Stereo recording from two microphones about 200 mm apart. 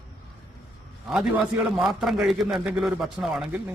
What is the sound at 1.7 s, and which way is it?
A man's voice, centre (ahead or behind).